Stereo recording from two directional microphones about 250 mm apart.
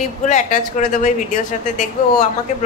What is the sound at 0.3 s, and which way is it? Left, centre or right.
Speech, left.